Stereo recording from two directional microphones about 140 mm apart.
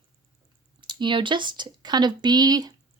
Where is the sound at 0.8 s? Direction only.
35° right (ahead or behind).